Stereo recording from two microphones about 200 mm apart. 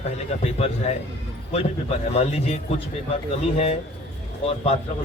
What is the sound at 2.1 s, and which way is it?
Speech, 30° left (ahead or behind).